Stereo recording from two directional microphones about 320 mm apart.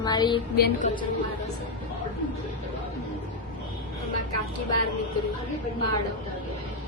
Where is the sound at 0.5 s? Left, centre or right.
Left.